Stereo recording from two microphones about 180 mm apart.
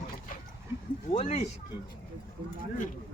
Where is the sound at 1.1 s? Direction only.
35° left (ahead or behind).